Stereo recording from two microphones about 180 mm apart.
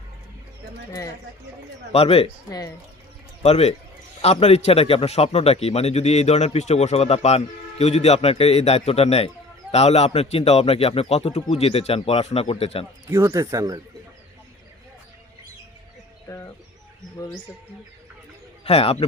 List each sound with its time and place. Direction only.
1.9 s a man's voice: 35° left (ahead or behind)
3.4 s a man's voice: 35° left (ahead or behind)
13.1 s speech: 15° right (ahead or behind)
16.3 s speech: 20° left (ahead or behind)
18.6 s speech: 35° left (ahead or behind)